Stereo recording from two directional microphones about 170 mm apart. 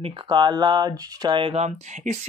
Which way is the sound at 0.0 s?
25° right (ahead or behind).